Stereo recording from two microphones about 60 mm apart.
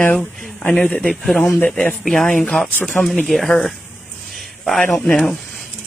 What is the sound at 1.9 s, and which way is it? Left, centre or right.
Speech, centre.